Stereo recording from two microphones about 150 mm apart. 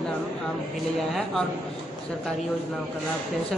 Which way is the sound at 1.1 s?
Centre (ahead or behind).